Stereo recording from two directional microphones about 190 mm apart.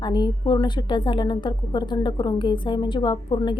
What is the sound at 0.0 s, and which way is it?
A woman's voice, 25° left (ahead or behind).